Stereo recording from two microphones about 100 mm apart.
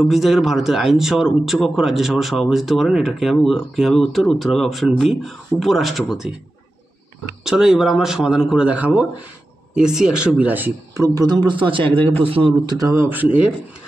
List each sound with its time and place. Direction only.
0.1 s speech: centre (ahead or behind)
7.4 s speech: 5° right (ahead or behind)
11.0 s a man's voice: 40° right (ahead or behind); by 12.5 s 65° right (ahead or behind)
12.6 s speech: 35° right (ahead or behind)
13.2 s speech: 15° right (ahead or behind)